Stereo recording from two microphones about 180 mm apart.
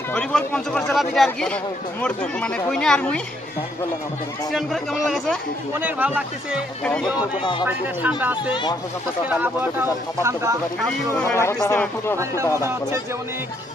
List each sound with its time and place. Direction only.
0.1 s speech: 5° left (ahead or behind)
4.5 s speech: centre (ahead or behind)
5.8 s speech: 10° right (ahead or behind)
6.8 s speech: 5° left (ahead or behind)
7.6 s speech: 10° right (ahead or behind)
11.1 s speech: 15° left (ahead or behind)
12.1 s speech: 15° right (ahead or behind)